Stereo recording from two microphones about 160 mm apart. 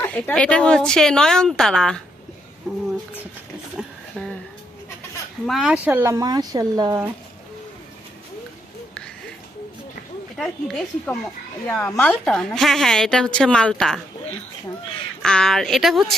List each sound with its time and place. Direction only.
0.0 s speech: 10° left (ahead or behind)
5.5 s speech: 5° right (ahead or behind); by 7.0 s 20° right (ahead or behind)
10.3 s a woman's voice: 5° left (ahead or behind)
15.2 s speech: 5° left (ahead or behind)